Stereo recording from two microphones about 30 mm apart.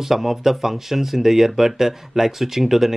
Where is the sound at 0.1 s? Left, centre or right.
Centre.